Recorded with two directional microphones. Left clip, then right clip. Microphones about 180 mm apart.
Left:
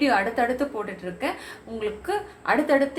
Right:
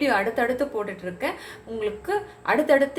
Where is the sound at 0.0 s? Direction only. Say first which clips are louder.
Even; 20° right (ahead or behind).